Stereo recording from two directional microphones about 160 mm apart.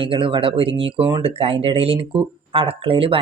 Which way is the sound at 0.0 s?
35° right (ahead or behind).